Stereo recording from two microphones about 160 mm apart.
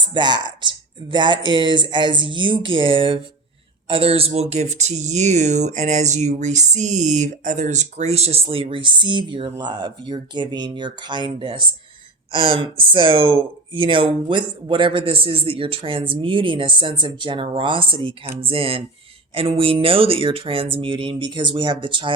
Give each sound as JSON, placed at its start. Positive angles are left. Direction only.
{"t": 0.0, "sound": "speech", "side_deg": -30}